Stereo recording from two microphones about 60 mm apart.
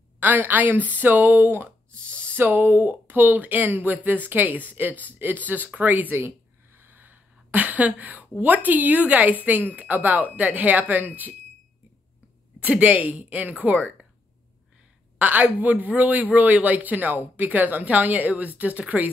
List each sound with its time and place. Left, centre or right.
0.2 s speech: right
6.2 s a sound: right
8.6 s speech: right
12.5 s speech: right
15.1 s speech: right